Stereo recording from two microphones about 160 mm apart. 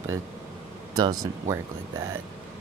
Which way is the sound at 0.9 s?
20° right (ahead or behind).